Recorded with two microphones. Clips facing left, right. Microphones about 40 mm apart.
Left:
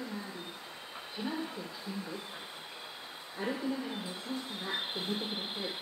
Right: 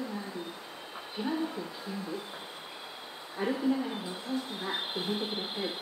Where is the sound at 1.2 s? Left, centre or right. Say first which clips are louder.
Right 4 dB; centre.